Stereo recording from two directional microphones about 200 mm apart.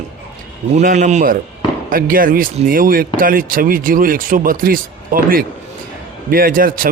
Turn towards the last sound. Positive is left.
turn(degrees=-45)  # may be behind; listen again after turning